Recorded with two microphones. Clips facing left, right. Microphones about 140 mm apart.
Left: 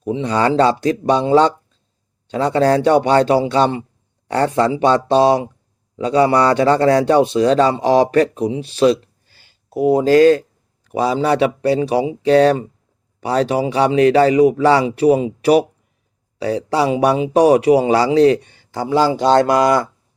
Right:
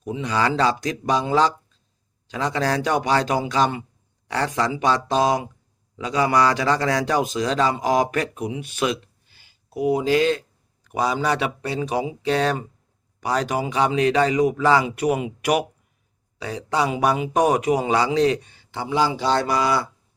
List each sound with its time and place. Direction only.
0.0 s a man's voice: 35° left (ahead or behind)
9.7 s a man's voice: 45° left (ahead or behind)
10.8 s a man's voice: 35° left (ahead or behind); by 19.9 s 50° left (ahead or behind)